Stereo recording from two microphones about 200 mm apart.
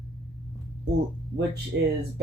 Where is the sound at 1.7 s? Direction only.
60° right (ahead or behind).